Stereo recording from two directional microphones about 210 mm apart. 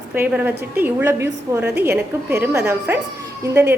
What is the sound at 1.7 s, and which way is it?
Speech, 50° right (ahead or behind).